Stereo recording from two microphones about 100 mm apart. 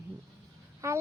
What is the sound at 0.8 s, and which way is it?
Child singing, 30° right (ahead or behind).